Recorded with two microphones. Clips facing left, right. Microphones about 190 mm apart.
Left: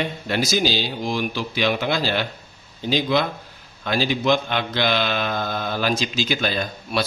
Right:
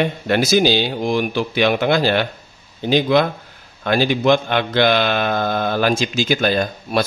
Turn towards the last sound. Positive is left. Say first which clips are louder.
# right 6 dB
turn(degrees=-50)  # may be behind; listen again after turning